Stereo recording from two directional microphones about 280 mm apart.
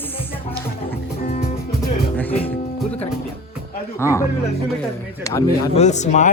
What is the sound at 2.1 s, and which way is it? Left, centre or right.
Music, centre.